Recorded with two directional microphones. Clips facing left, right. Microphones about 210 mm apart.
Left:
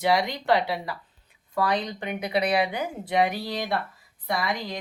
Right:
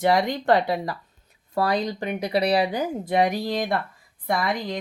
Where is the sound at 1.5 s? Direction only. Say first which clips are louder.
Right 3 dB; 40° right (ahead or behind).